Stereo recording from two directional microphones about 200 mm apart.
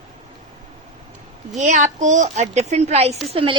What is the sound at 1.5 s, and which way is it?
A woman's voice, 35° right (ahead or behind).